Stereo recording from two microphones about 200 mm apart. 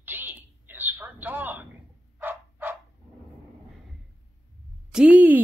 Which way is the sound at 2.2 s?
10° right (ahead or behind).